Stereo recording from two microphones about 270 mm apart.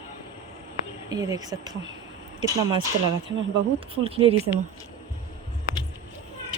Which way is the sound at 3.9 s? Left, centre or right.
Right.